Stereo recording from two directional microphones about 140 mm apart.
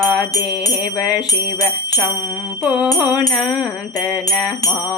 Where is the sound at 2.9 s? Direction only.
5° right (ahead or behind).